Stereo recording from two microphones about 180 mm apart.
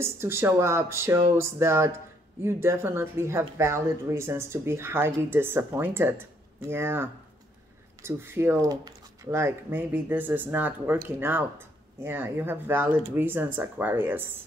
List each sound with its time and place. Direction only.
0.0 s speech: 15° right (ahead or behind)